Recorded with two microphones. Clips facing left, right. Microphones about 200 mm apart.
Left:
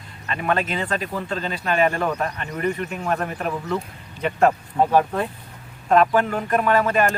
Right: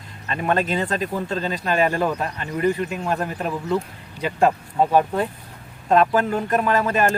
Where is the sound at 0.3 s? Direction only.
35° right (ahead or behind).